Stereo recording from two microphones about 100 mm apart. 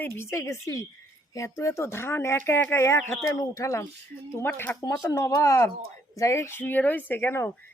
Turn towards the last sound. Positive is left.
turn(degrees=20)  # may be behind; listen again after turning